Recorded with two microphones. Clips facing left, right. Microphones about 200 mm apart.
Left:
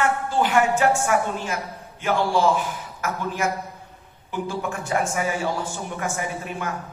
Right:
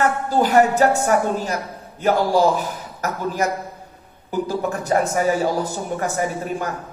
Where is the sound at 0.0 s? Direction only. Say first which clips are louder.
Right 3 dB; 40° right (ahead or behind).